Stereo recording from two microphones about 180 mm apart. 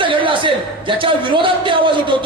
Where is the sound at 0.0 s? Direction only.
30° right (ahead or behind).